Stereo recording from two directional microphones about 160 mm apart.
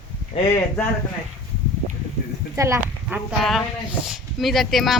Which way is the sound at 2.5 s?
15° right (ahead or behind).